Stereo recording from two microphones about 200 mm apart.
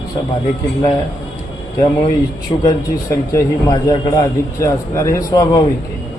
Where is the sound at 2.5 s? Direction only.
30° left (ahead or behind).